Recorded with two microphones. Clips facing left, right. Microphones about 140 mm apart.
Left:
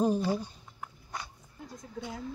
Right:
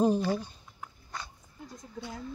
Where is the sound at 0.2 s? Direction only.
10° left (ahead or behind).